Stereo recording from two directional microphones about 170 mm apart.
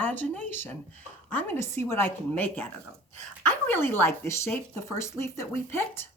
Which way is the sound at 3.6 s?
15° left (ahead or behind).